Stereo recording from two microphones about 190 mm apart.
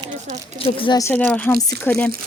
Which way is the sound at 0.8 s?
20° left (ahead or behind).